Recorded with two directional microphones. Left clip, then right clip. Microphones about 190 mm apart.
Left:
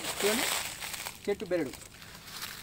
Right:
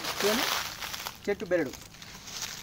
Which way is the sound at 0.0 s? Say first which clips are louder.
Right 2 dB; 5° left (ahead or behind).